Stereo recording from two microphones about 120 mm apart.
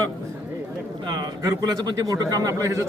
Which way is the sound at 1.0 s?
40° right (ahead or behind).